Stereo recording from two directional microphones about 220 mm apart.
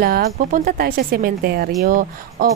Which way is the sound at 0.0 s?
40° right (ahead or behind).